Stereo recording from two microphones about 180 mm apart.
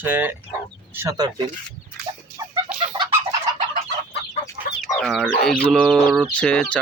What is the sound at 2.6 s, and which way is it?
Chicken, 25° right (ahead or behind).